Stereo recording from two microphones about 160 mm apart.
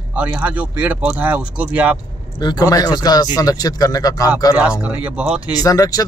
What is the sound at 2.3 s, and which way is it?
Speech, 25° left (ahead or behind).